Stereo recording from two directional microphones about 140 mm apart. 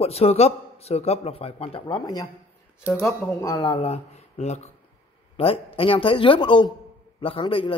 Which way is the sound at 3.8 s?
50° left (ahead or behind).